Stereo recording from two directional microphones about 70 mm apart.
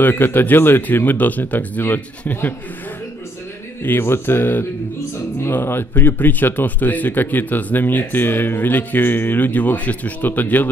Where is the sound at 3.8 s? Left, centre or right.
Left.